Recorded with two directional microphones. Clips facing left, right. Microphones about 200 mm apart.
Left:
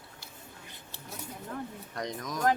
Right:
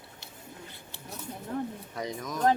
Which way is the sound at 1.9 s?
5° right (ahead or behind).